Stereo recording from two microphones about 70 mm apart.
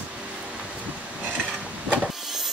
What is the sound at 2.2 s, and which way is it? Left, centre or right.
Vehicle, centre.